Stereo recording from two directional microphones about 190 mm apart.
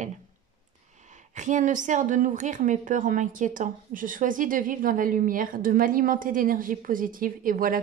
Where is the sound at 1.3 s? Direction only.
40° right (ahead or behind).